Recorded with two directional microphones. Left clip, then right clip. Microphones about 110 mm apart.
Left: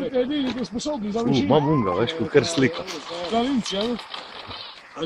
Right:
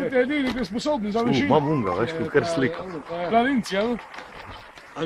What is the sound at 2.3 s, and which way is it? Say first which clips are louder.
Speech: left 3 dB; 30° left (ahead or behind).